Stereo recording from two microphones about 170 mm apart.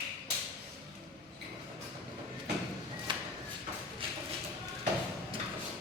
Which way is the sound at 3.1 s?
25° right (ahead or behind).